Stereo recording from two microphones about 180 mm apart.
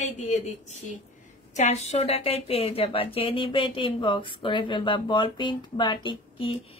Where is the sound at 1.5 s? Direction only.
40° left (ahead or behind).